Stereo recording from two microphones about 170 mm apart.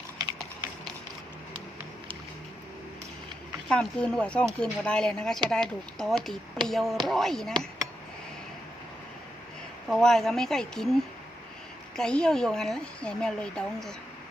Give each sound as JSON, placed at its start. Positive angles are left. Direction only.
{"t": 0.2, "sound": "a sound", "side_deg": -20}
{"t": 3.7, "sound": "speech", "side_deg": 5}
{"t": 9.9, "sound": "speech", "side_deg": 0}